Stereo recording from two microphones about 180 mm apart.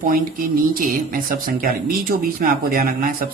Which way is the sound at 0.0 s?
50° right (ahead or behind).